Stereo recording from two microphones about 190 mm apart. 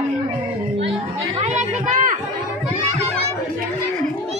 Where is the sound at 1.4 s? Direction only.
35° right (ahead or behind).